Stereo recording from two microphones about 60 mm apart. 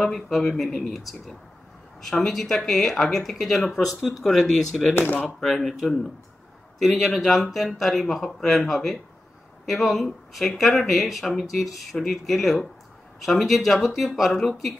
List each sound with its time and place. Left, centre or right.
0.0 s speech: centre
4.9 s speech: left
5.2 s speech: centre